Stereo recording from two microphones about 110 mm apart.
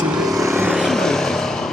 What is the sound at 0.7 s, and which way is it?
Vehicle, centre (ahead or behind).